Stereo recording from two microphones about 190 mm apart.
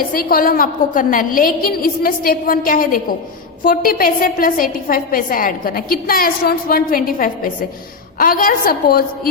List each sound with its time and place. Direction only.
0.1 s a woman's voice: 50° left (ahead or behind)